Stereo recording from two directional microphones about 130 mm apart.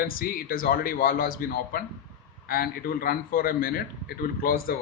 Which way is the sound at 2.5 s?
90° left.